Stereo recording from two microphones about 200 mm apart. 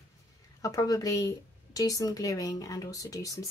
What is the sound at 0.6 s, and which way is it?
A woman's voice, 15° left (ahead or behind).